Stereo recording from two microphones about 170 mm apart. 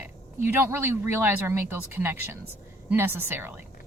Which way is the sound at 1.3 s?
10° right (ahead or behind).